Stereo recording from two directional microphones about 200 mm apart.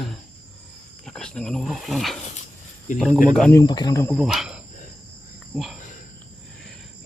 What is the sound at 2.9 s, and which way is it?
Speech, 40° left (ahead or behind).